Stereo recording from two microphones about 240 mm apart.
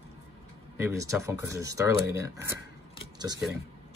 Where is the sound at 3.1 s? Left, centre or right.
Centre.